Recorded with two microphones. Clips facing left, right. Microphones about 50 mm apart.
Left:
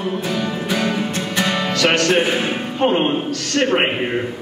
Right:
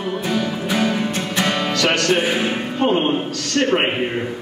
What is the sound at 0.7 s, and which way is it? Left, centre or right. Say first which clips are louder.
Music: right 1 dB; centre.